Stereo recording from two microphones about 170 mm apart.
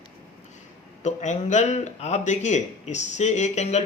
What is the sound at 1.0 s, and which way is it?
A man's voice, 45° left (ahead or behind).